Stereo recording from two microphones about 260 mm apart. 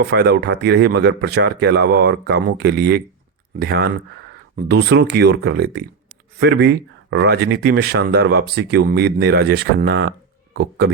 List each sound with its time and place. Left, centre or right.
0.0 s speech: right